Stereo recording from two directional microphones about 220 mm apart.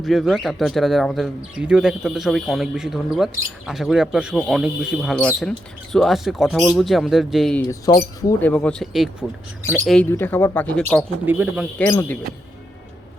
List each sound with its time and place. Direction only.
0.0 s speech: centre (ahead or behind)
7.7 s speech: 15° left (ahead or behind)
11.3 s speech: 10° right (ahead or behind)
11.9 s speech: 10° left (ahead or behind)